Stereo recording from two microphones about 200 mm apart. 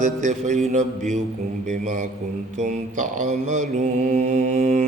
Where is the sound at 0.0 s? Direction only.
40° right (ahead or behind).